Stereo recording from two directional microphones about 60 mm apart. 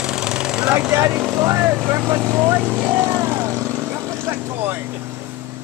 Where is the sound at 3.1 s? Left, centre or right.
Right.